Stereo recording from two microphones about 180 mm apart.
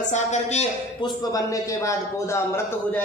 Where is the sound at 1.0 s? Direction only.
20° left (ahead or behind).